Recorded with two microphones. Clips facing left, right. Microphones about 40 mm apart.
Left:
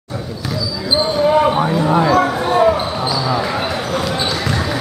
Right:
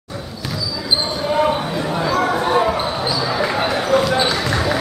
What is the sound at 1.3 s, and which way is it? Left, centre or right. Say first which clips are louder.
Basketball bounce: even; centre.